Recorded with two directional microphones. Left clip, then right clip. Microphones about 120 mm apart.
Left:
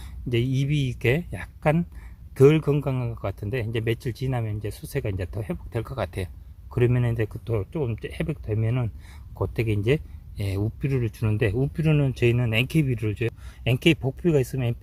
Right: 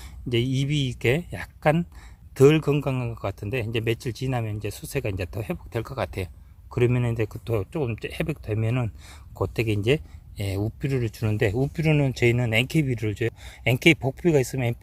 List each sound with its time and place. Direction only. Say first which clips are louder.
0.0 s speech: right 1 dB; 30° right (ahead or behind)
7.4 s speech: right 2 dB; 50° right (ahead or behind)